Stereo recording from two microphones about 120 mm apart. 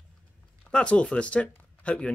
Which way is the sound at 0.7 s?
10° left (ahead or behind).